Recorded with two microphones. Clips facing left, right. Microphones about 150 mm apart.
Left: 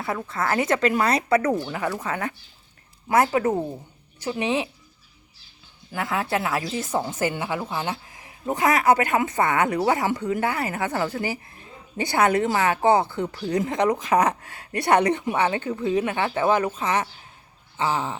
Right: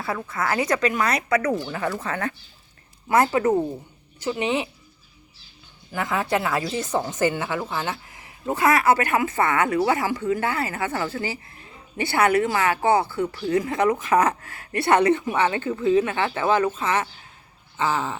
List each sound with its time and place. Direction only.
0.3 s speech: 25° left (ahead or behind)
5.9 s speech: 5° left (ahead or behind)